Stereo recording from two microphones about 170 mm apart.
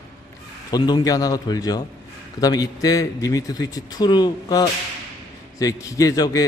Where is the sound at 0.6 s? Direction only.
25° left (ahead or behind).